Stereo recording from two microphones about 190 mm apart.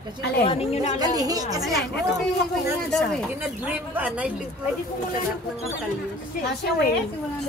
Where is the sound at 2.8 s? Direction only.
5° left (ahead or behind).